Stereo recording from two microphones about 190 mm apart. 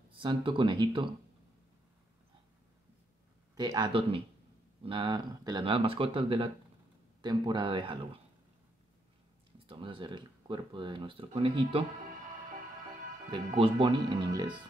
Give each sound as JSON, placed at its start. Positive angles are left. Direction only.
{"t": 0.1, "sound": "speech", "side_deg": -25}
{"t": 3.5, "sound": "speech", "side_deg": -20}
{"t": 9.7, "sound": "speech", "side_deg": -25}
{"t": 13.6, "sound": "speech", "side_deg": -25}